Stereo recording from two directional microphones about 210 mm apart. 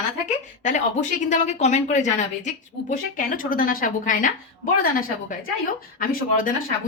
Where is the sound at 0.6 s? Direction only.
35° left (ahead or behind).